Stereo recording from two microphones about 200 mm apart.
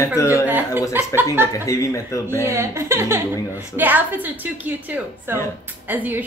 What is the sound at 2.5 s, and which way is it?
A woman's voice, 15° right (ahead or behind).